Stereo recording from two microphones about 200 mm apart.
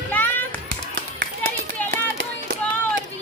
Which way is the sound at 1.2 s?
50° right (ahead or behind).